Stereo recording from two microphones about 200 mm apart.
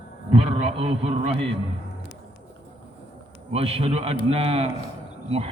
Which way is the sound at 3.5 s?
30° right (ahead or behind).